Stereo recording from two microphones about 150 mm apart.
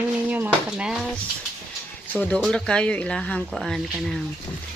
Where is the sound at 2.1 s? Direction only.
10° left (ahead or behind).